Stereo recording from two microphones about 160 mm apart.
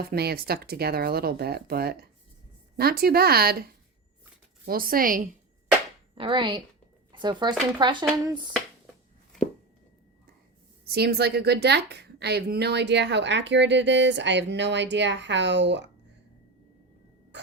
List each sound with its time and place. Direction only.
0.1 s speech: 75° right (ahead or behind); by 5.3 s 60° right (ahead or behind)
6.1 s speech: 30° right (ahead or behind)
7.8 s a sound: 30° right (ahead or behind)
10.8 s a woman's voice: 80° right